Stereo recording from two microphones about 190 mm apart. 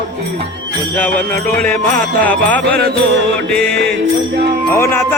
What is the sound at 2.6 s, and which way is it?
Music, 60° right (ahead or behind).